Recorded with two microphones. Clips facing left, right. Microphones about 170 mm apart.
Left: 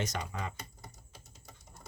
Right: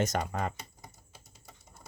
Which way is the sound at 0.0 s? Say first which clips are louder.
Right 6 dB; 50° right (ahead or behind).